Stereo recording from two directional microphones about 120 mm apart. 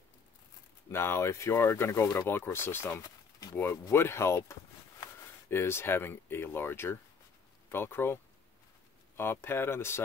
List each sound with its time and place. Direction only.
0.9 s speech: 20° left (ahead or behind)